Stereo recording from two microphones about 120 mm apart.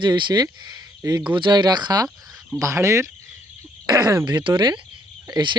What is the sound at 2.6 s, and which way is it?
Speech, 25° right (ahead or behind).